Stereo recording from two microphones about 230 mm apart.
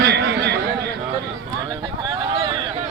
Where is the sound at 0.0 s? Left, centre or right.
Right.